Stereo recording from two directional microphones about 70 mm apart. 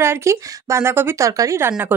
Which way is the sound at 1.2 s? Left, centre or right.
Right.